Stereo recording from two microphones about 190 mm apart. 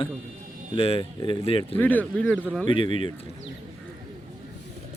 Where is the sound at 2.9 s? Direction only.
40° right (ahead or behind).